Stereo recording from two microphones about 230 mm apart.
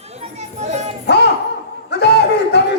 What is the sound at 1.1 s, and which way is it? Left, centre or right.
Speech, left.